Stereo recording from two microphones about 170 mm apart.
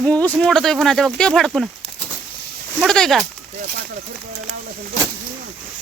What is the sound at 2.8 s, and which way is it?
Speech, 5° left (ahead or behind).